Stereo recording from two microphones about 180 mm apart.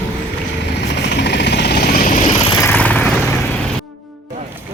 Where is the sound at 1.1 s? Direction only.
70° left (ahead or behind); by 2.2 s 50° left (ahead or behind).